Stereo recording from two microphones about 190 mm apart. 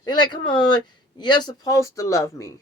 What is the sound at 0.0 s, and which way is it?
Speech, 20° left (ahead or behind).